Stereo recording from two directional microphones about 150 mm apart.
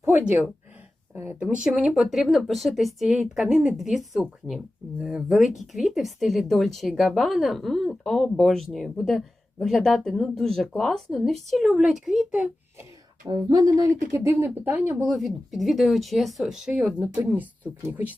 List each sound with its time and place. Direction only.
0.0 s speech: 10° right (ahead or behind)
13.2 s speech: 25° right (ahead or behind); by 18.2 s 10° right (ahead or behind)